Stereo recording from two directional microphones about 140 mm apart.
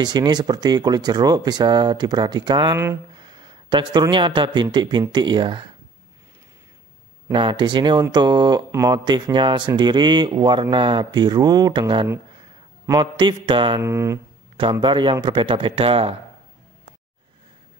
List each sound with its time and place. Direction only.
0.0 s speech: 30° right (ahead or behind)
7.3 s speech: 35° right (ahead or behind)
13.7 s speech: 20° right (ahead or behind)
14.6 s speech: 35° right (ahead or behind)